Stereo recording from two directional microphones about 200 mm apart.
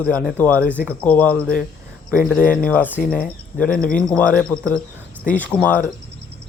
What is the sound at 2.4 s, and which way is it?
Speech, 45° left (ahead or behind).